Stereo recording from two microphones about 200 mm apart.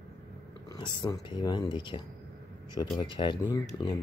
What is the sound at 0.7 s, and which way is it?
Speech, 20° left (ahead or behind).